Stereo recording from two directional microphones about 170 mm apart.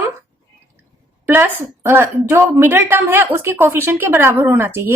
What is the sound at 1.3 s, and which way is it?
A woman's voice, 15° right (ahead or behind).